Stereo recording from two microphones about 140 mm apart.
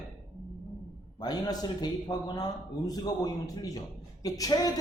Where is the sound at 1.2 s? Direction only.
30° left (ahead or behind).